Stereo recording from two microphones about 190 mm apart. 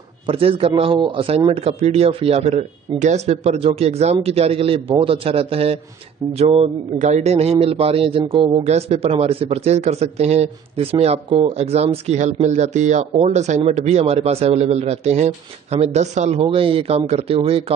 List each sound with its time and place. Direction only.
0.3 s speech: 30° right (ahead or behind)